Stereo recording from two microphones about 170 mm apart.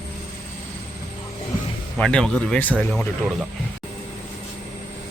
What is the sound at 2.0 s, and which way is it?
Speech, 5° left (ahead or behind).